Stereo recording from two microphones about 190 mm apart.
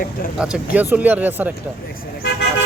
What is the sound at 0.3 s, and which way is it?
Speech, 5° right (ahead or behind).